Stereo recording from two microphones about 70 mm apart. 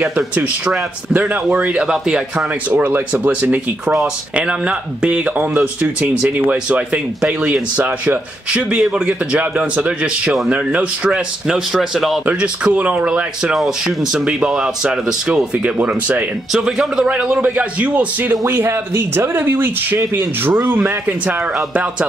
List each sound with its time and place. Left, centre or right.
1.1 s a man's voice: right
2.8 s a man's voice: right
12.3 s a man's voice: centre
16.5 s a man's voice: centre
18.5 s speech: right